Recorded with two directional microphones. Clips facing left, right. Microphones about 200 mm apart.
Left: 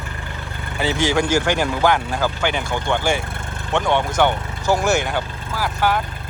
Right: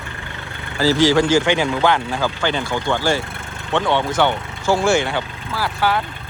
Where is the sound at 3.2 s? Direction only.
Centre (ahead or behind).